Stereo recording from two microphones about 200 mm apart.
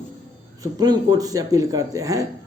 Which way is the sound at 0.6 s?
20° right (ahead or behind).